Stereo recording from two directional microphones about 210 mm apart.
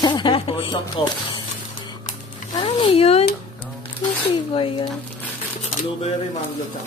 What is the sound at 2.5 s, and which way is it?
Speech, 30° left (ahead or behind).